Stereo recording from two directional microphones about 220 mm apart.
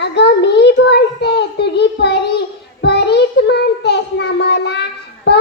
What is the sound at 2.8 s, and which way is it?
Child singing, 50° left (ahead or behind).